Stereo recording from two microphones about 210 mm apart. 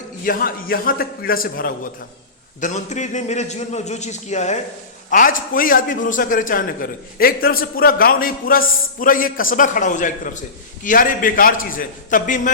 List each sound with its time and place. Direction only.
0.3 s a man's voice: 45° left (ahead or behind)